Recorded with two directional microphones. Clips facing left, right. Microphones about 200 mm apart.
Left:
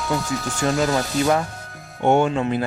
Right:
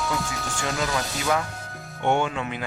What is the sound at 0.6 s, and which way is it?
Speech, 45° left (ahead or behind).